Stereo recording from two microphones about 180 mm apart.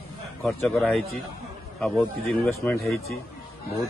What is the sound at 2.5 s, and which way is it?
Speech, 15° left (ahead or behind).